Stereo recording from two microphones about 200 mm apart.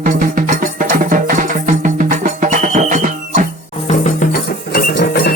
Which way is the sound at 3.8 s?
40° left (ahead or behind).